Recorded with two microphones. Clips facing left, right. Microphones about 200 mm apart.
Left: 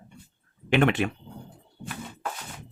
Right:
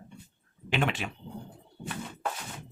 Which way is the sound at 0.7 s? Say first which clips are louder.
Left 8 dB; 55° left (ahead or behind).